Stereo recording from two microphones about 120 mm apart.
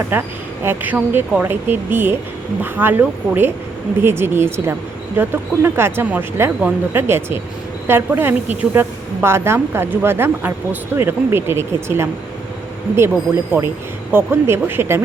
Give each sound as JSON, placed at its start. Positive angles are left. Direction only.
{"t": 0.1, "sound": "a woman's voice", "side_deg": -20}